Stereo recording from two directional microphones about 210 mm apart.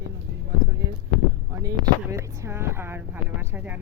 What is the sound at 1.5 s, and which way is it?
Speech, 15° right (ahead or behind).